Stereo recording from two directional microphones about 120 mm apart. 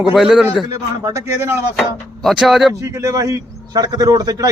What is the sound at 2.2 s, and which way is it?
Speech, centre (ahead or behind).